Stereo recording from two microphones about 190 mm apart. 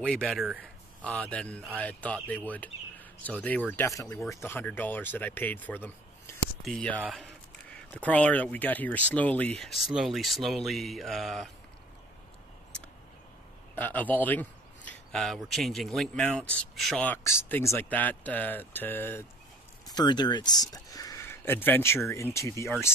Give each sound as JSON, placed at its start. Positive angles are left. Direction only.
{"t": 0.0, "sound": "a man's voice", "side_deg": 5}
{"t": 13.7, "sound": "a man's voice", "side_deg": 10}
{"t": 19.9, "sound": "speech", "side_deg": 20}